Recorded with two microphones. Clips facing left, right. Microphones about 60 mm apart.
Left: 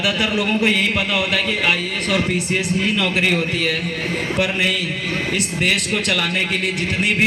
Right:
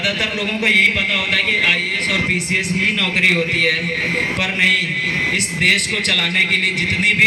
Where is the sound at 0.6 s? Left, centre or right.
Right.